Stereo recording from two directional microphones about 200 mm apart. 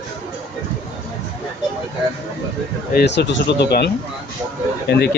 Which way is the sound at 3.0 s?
60° left (ahead or behind).